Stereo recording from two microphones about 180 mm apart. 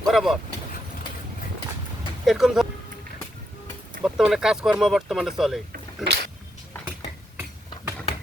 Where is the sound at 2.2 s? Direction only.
Centre (ahead or behind).